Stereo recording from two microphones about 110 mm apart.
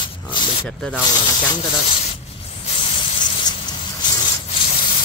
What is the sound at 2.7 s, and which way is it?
Spray, 50° left (ahead or behind).